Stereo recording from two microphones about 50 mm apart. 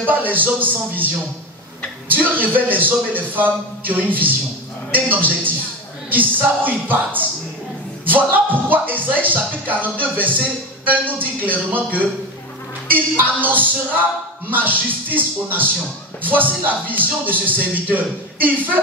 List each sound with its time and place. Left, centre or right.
0.0 s speech: right
2.0 s speech: right